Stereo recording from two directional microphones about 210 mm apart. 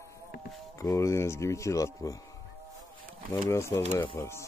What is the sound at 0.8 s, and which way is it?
Speech, 15° left (ahead or behind).